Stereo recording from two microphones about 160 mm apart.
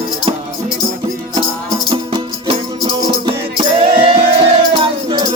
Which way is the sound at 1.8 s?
30° right (ahead or behind).